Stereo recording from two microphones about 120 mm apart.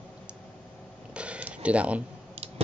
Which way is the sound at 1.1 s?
10° right (ahead or behind).